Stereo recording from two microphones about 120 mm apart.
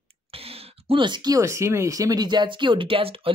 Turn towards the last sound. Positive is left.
turn(degrees=-50)  # may be behind; listen again after turning